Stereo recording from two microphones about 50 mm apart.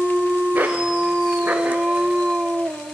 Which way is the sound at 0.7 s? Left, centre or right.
Centre.